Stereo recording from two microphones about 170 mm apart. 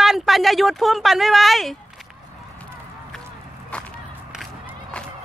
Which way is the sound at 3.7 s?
5° left (ahead or behind).